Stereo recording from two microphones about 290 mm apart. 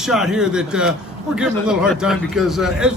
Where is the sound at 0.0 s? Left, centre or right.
Centre.